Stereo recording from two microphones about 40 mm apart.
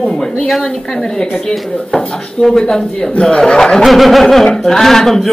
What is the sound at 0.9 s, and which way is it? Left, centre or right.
Speech, centre.